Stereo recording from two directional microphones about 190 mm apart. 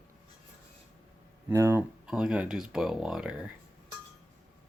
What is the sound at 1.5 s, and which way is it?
Speech, 15° right (ahead or behind).